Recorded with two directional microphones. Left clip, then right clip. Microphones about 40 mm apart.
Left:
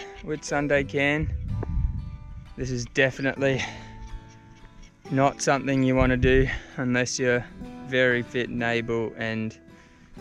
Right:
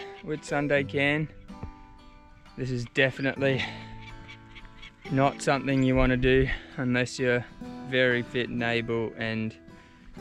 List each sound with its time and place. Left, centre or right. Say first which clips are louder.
0.0 s speech: left 2 dB; left
2.6 s speech: left 2 dB; centre
5.3 s speech: left 2 dB; centre